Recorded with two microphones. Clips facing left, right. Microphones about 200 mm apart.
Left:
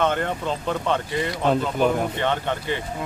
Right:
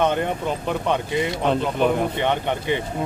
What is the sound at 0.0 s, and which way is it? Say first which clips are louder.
Speech: right 2 dB; 15° right (ahead or behind).